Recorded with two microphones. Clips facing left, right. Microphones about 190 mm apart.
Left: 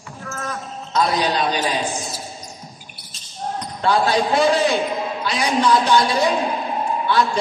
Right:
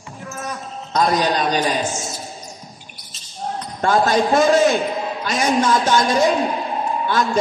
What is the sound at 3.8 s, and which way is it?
A man's voice, 45° right (ahead or behind).